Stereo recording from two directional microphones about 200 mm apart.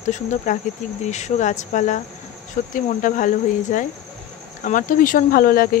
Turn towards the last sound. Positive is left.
turn(degrees=45)  # may be behind; listen again after turning